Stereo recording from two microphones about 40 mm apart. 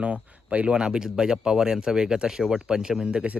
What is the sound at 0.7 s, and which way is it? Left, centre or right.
Speech, right.